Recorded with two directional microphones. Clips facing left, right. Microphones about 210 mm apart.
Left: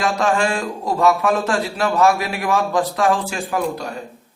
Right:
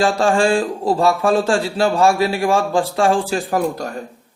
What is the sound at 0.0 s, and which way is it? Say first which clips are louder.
A man's voice: right 3 dB; 30° right (ahead or behind).